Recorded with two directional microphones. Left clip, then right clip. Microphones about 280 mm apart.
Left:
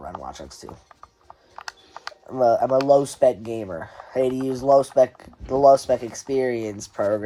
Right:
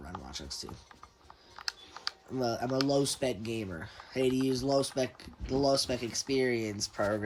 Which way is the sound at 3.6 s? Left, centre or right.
Centre.